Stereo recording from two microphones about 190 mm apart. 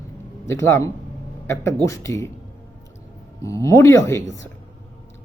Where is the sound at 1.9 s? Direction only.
15° left (ahead or behind).